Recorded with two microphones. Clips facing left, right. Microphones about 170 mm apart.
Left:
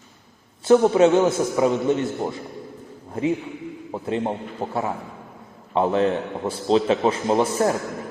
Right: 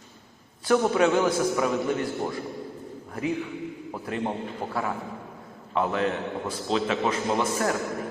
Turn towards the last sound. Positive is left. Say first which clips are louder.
# left 5 dB
turn(degrees=30)  # may be behind; listen again after turning